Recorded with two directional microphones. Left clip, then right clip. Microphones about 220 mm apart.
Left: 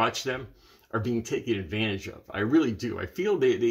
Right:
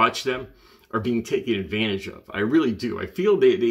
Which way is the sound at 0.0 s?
10° right (ahead or behind).